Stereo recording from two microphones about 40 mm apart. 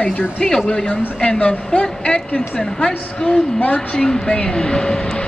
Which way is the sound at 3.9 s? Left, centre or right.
Centre.